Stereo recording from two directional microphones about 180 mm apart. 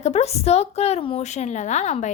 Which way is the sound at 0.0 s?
35° left (ahead or behind).